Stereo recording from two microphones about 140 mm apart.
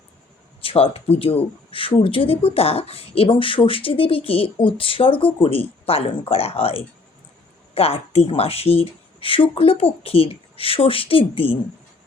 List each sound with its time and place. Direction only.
0.6 s speech: 40° left (ahead or behind)